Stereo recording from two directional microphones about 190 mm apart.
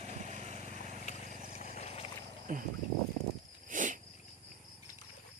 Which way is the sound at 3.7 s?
40° right (ahead or behind).